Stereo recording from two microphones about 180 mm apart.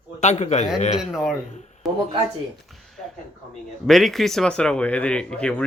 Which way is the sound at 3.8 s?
Centre (ahead or behind).